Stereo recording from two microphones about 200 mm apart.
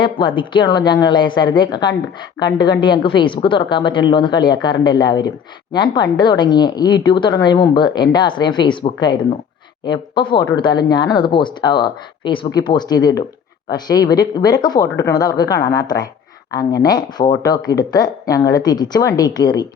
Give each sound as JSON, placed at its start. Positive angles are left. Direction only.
{"t": 0.0, "sound": "speech", "side_deg": 25}